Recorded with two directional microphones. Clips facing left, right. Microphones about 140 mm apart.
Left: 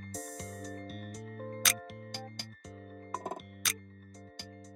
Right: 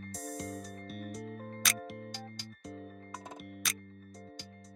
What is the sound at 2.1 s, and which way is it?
Music, 55° left (ahead or behind).